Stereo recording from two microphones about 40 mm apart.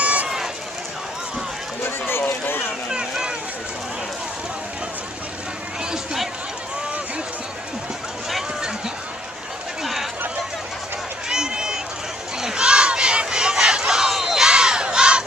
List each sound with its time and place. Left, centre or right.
0.0 s run: right
2.2 s a sound: left
2.9 s speech: centre
11.2 s run: centre
12.4 s crowd: centre
12.6 s crowd: right; by 14.4 s centre
14.4 s crowd: centre